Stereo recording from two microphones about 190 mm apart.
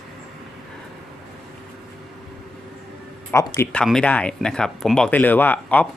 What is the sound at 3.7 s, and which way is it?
Speech, 5° left (ahead or behind).